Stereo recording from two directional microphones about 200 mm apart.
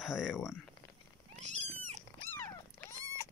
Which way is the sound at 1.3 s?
35° right (ahead or behind).